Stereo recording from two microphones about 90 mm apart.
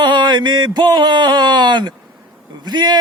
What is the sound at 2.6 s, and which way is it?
Speech, 55° right (ahead or behind).